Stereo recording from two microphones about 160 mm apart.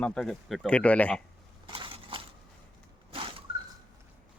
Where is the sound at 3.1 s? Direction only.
35° right (ahead or behind).